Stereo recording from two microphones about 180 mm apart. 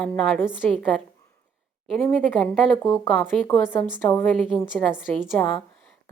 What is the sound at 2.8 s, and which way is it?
A woman's voice, 20° left (ahead or behind).